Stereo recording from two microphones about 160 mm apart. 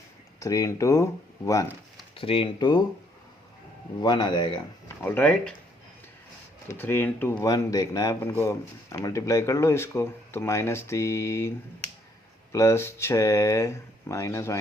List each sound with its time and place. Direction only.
0.3 s speech: 20° left (ahead or behind)
2.1 s speech: 35° left (ahead or behind)
4.0 s speech: 25° left (ahead or behind)
5.0 s speech: 10° left (ahead or behind)
6.7 s speech: 15° left (ahead or behind)